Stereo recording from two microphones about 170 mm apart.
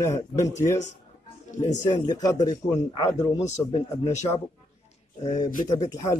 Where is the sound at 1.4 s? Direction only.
45° left (ahead or behind).